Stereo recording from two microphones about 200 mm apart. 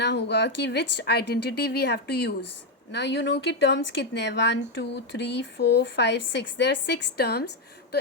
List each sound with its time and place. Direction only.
0.0 s speech: 60° left (ahead or behind)